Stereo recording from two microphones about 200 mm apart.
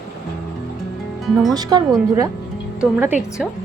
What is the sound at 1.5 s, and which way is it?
Speech, 20° right (ahead or behind).